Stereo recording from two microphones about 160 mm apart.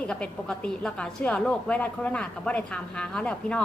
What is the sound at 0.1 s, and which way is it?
A woman's voice, 5° left (ahead or behind).